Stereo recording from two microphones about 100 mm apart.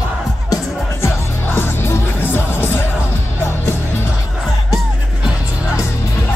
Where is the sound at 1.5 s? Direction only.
20° left (ahead or behind).